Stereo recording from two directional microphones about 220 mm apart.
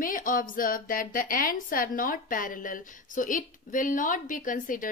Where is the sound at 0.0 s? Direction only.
40° left (ahead or behind).